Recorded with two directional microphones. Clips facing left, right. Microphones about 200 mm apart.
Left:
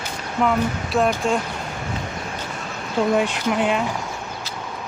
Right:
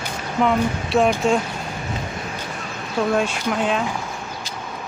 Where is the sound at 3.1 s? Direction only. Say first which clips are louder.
Left 1 dB; 15° left (ahead or behind).